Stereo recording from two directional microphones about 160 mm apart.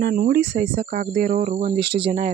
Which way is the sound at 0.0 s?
65° right (ahead or behind).